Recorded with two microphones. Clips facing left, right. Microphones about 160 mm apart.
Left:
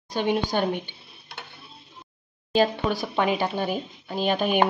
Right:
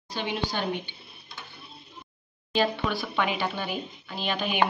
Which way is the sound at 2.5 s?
40° left (ahead or behind).